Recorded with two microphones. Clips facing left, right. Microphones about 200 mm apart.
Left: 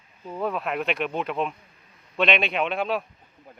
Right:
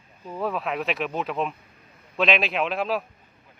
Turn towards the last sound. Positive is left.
turn(degrees=0)  # may be behind; listen again after turning